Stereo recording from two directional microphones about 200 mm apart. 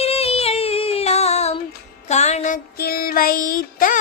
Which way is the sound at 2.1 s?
35° left (ahead or behind).